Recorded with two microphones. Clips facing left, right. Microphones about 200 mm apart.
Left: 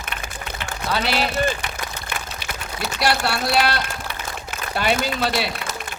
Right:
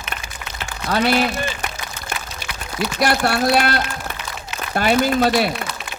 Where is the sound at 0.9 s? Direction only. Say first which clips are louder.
Right 5 dB; 50° right (ahead or behind).